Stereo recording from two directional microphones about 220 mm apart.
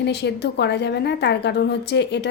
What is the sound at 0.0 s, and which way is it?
A woman's voice, 50° left (ahead or behind).